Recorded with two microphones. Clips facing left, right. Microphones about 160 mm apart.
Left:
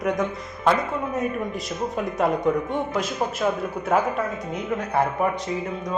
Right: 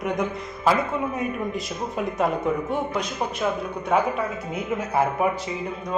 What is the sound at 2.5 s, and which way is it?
Speech, 5° right (ahead or behind).